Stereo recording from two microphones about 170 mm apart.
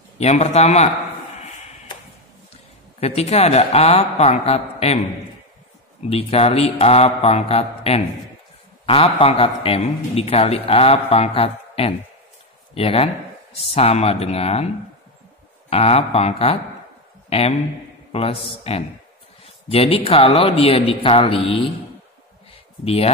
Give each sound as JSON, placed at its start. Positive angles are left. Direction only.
{"t": 0.2, "sound": "a man's voice", "side_deg": 40}
{"t": 3.0, "sound": "a man's voice", "side_deg": 40}
{"t": 6.0, "sound": "a man's voice", "side_deg": 35}
{"t": 15.7, "sound": "a man's voice", "side_deg": 35}
{"t": 22.8, "sound": "a man's voice", "side_deg": 35}